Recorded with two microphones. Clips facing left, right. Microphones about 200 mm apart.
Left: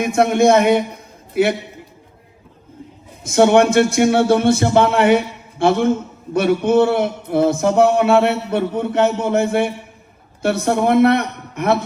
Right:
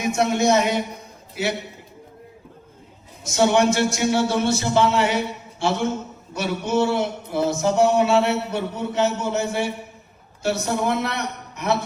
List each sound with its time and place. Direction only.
0.0 s a man's voice: 55° left (ahead or behind)
3.2 s speech: 55° left (ahead or behind)